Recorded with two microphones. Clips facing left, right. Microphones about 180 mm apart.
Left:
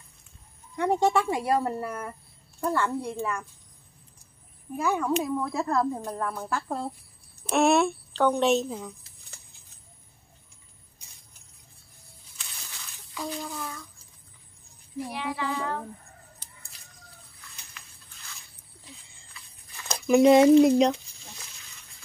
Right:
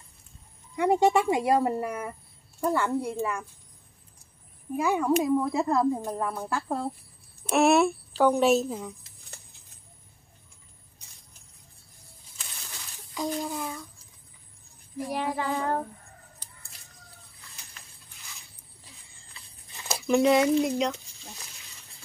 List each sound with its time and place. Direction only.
0.7 s a woman's voice: 10° right (ahead or behind)
4.7 s a woman's voice: 10° right (ahead or behind)
13.4 s a woman's voice: 20° right (ahead or behind)
15.0 s child singing: 45° right (ahead or behind)
19.3 s a sound: 25° right (ahead or behind)
20.2 s speech: 30° left (ahead or behind)